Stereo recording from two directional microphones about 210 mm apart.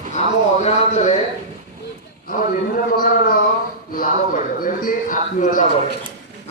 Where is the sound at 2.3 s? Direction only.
45° left (ahead or behind).